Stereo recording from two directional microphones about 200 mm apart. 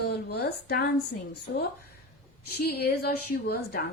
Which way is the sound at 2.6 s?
50° left (ahead or behind).